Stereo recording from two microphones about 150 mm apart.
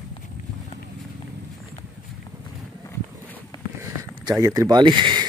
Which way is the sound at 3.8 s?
20° right (ahead or behind).